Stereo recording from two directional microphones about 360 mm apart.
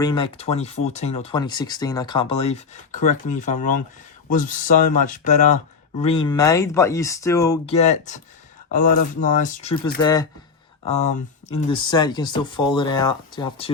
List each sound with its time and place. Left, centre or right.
0.0 s speech: centre